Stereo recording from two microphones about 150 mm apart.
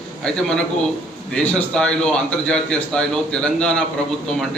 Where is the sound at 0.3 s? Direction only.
5° left (ahead or behind).